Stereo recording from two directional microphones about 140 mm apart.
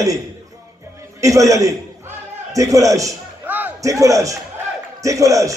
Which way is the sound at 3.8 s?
25° right (ahead or behind).